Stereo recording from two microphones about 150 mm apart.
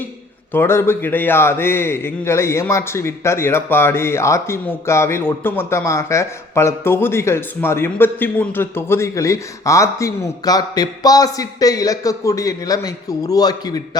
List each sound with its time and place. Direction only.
0.5 s a man's voice: 15° left (ahead or behind)